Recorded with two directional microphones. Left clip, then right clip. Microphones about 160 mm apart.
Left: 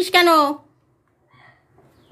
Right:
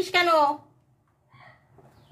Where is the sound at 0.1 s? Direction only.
75° left (ahead or behind).